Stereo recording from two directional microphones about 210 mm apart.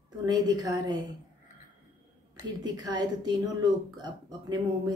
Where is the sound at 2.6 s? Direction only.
20° right (ahead or behind).